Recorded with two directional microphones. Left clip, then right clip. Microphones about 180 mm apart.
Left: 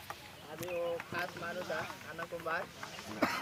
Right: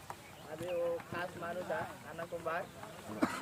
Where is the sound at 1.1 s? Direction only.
55° left (ahead or behind).